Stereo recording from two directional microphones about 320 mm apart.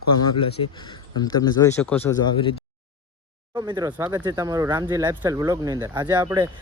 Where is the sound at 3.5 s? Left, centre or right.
Centre.